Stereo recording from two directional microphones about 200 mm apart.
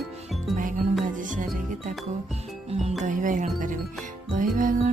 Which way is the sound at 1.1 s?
40° right (ahead or behind).